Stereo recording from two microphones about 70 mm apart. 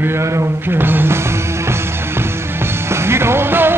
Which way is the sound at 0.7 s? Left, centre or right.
Right.